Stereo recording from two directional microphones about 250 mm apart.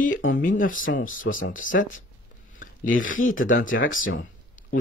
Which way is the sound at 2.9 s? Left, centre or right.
Left.